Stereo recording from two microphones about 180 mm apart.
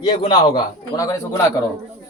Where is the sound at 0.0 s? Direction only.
25° left (ahead or behind).